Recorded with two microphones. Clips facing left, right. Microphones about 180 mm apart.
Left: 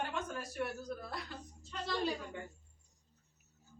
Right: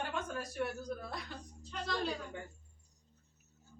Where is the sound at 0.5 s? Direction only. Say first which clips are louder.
Right 1 dB; 5° left (ahead or behind).